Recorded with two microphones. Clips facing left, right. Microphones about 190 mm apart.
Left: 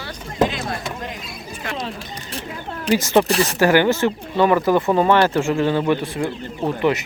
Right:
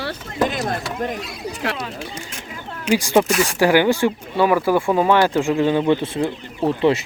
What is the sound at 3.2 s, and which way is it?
Speech, 35° left (ahead or behind).